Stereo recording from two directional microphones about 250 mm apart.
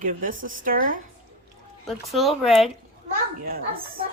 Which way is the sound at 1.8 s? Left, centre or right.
Centre.